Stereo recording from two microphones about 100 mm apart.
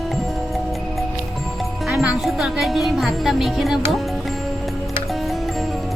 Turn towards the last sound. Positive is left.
turn(degrees=0)  # may be behind; listen again after turning